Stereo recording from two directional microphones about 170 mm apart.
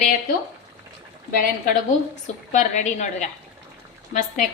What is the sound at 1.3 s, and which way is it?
A woman's voice, 50° left (ahead or behind).